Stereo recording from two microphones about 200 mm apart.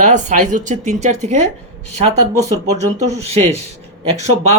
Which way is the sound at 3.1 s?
30° right (ahead or behind).